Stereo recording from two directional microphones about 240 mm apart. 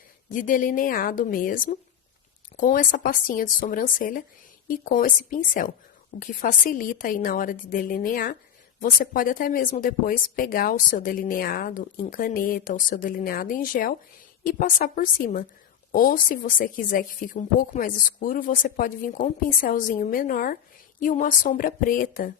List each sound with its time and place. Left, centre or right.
0.3 s speech: left